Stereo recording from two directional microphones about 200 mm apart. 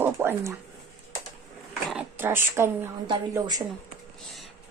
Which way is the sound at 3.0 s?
20° right (ahead or behind).